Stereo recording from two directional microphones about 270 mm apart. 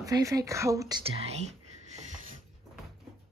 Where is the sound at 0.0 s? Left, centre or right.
Centre.